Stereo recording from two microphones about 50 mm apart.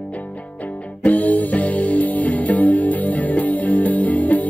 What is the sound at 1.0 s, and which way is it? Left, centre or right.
Music, left.